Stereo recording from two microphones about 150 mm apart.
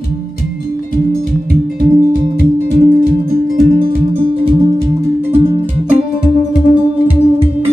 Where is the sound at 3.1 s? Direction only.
70° right (ahead or behind).